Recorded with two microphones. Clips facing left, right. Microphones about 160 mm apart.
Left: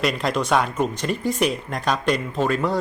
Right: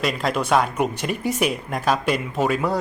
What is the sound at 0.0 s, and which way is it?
Speech, centre (ahead or behind).